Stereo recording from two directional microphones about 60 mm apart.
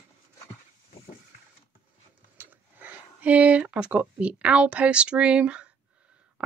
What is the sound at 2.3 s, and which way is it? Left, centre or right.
Speech, right.